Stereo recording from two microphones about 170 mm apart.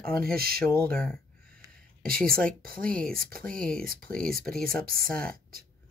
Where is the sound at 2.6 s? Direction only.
60° right (ahead or behind).